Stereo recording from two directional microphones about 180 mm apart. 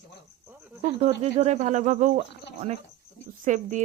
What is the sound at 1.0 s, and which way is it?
Speech, 35° right (ahead or behind).